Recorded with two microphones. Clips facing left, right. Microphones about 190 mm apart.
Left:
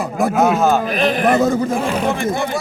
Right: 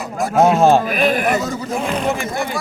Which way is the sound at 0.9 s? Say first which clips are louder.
Even; 5° right (ahead or behind).